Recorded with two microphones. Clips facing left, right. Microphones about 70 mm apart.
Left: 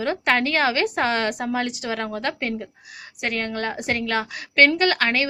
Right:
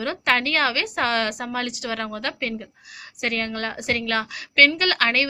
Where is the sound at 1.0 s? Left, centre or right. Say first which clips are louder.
Left 1 dB; centre.